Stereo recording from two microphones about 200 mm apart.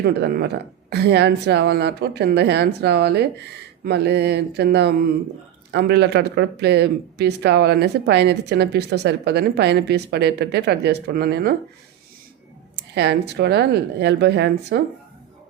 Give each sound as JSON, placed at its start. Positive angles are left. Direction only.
{"t": 0.0, "sound": "speech", "side_deg": -50}
{"t": 12.7, "sound": "speech", "side_deg": -60}